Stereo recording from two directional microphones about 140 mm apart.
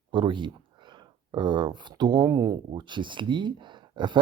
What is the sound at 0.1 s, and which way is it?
Speech, 35° right (ahead or behind).